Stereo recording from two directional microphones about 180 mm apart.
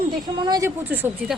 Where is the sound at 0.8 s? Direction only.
10° right (ahead or behind).